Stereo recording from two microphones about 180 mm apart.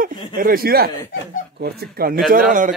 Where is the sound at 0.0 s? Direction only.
50° right (ahead or behind).